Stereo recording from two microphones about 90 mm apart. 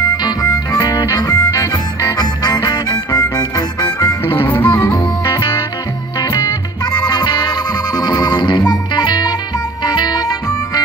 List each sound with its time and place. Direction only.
0.2 s harmonica: 45° left (ahead or behind)
4.4 s music: 25° left (ahead or behind)
5.2 s music: 45° left (ahead or behind)
7.0 s music: 50° left (ahead or behind)